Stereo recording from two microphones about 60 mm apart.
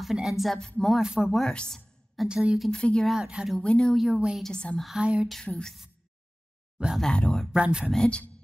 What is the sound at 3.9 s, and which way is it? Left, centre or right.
Speech, centre.